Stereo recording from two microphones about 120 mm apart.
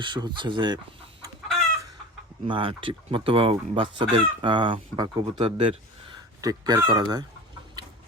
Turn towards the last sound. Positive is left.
turn(degrees=-35)  # may be behind; listen again after turning